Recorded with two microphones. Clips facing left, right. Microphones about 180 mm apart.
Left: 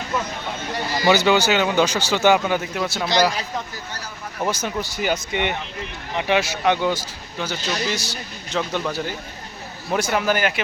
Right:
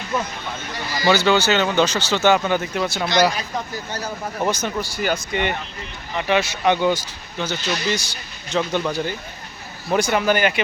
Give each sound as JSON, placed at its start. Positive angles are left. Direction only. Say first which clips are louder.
{"t": 1.0, "sound": "speech", "louder": "even", "side_deg": 15}
{"t": 4.4, "sound": "speech", "louder": "right 1 dB", "side_deg": 10}
{"t": 4.8, "sound": "speech", "louder": "even", "side_deg": 20}
{"t": 5.3, "sound": "speech", "louder": "right 1 dB", "side_deg": 0}